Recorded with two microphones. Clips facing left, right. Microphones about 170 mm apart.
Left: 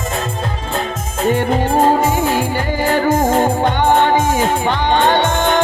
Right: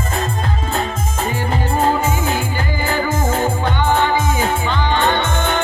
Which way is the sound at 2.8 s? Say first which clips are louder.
Left 6 dB; 60° left (ahead or behind).